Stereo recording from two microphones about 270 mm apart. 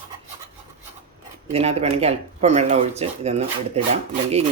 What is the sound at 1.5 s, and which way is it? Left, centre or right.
Rub, right.